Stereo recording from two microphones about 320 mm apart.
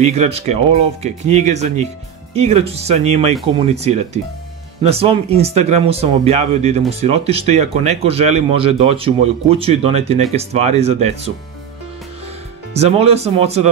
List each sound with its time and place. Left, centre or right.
0.0 s speech: right
12.7 s speech: centre